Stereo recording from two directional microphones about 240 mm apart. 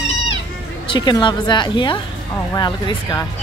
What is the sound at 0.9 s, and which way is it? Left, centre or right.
A woman's voice, centre.